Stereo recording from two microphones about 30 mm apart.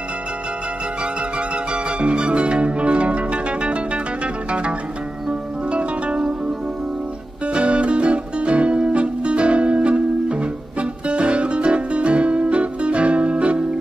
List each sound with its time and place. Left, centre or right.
1.5 s music: right
4.5 s zither: right
5.7 s music: right
7.4 s music: right